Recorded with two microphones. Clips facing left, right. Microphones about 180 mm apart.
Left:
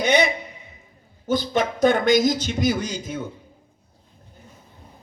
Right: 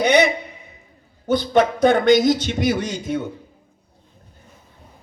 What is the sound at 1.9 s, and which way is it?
Speech, 45° left (ahead or behind).